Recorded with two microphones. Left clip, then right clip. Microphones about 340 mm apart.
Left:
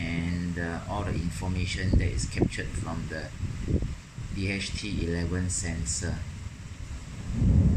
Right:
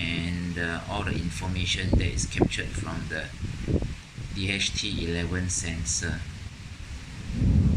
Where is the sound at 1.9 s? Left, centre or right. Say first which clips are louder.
Right 3 dB; right.